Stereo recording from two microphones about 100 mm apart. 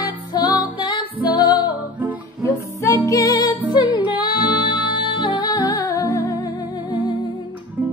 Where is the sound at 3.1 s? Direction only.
40° left (ahead or behind).